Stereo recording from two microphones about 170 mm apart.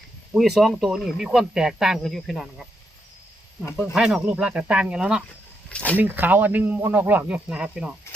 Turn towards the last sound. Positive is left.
turn(degrees=-5)  # may be behind; listen again after turning